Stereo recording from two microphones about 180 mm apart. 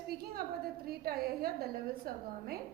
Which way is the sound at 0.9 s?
60° right (ahead or behind).